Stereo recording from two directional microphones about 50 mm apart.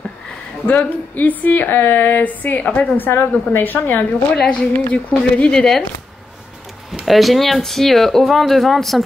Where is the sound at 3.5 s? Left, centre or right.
Left.